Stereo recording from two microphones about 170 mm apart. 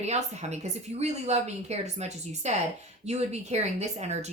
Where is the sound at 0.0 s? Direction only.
40° right (ahead or behind).